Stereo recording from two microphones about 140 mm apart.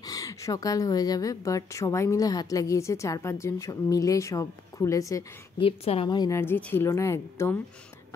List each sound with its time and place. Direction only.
0.0 s a woman's voice: 25° left (ahead or behind)
5.6 s a woman's voice: 40° left (ahead or behind)
6.0 s a woman's voice: 30° left (ahead or behind)